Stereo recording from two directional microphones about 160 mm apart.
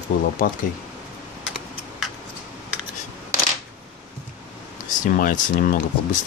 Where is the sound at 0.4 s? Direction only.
60° left (ahead or behind).